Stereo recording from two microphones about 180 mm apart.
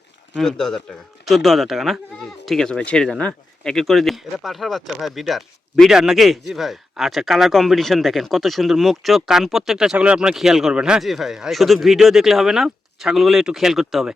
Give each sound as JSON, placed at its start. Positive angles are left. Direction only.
{"t": 0.3, "sound": "speech", "side_deg": 0}